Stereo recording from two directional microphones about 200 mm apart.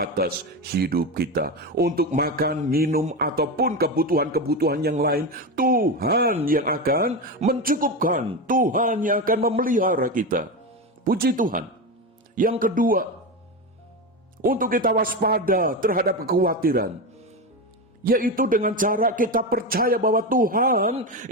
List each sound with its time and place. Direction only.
0.0 s a man's voice: 50° right (ahead or behind)
7.1 s a man's voice: 35° right (ahead or behind)
14.4 s a man's voice: 45° right (ahead or behind)
18.0 s a man's voice: 45° right (ahead or behind)